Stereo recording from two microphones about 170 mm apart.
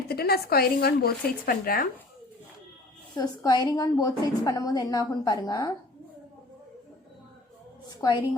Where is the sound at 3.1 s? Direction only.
20° left (ahead or behind).